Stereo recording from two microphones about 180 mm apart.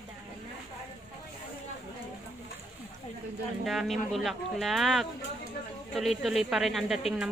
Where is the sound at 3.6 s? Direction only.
Centre (ahead or behind).